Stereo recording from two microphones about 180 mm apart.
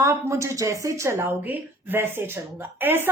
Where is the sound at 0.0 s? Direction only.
15° right (ahead or behind).